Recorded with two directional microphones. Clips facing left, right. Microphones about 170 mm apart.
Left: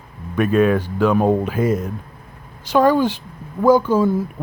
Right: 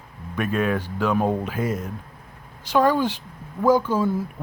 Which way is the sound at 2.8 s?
75° left (ahead or behind).